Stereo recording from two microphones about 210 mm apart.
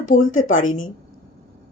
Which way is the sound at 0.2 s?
70° left (ahead or behind).